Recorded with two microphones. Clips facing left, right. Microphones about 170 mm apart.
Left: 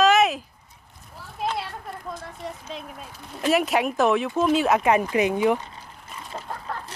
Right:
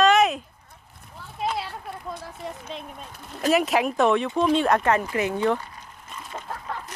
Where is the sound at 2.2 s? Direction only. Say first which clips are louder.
Even; centre (ahead or behind); by 5.7 s 15° left (ahead or behind).